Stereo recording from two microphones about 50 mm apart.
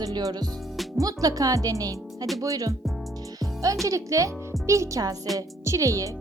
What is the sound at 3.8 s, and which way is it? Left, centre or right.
Speech, right.